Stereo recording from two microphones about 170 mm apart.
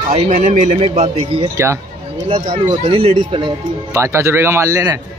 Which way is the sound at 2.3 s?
25° right (ahead or behind).